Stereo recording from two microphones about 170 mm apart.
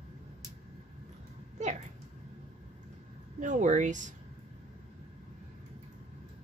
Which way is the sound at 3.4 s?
45° right (ahead or behind).